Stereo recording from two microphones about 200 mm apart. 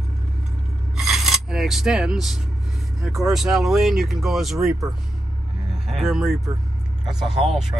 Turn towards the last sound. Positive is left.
turn(degrees=0)  # may be behind; listen again after turning